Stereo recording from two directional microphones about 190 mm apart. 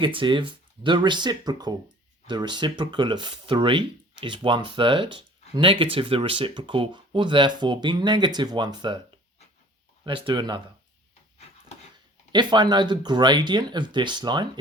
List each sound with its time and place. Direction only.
0.0 s speech: 25° right (ahead or behind)
10.1 s speech: 25° right (ahead or behind)
12.3 s speech: 25° right (ahead or behind)